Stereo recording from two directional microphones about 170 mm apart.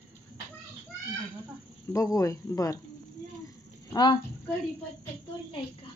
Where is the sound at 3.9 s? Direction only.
25° left (ahead or behind).